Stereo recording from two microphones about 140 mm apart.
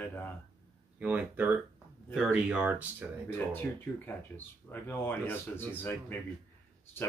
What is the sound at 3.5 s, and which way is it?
Speech, 15° left (ahead or behind).